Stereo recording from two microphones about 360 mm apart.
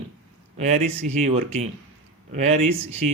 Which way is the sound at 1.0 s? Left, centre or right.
Centre.